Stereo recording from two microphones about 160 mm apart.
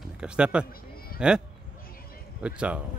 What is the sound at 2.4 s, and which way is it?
Speech, 5° right (ahead or behind).